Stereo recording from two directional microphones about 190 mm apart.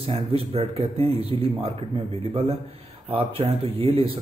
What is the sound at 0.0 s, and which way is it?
Speech, 30° right (ahead or behind).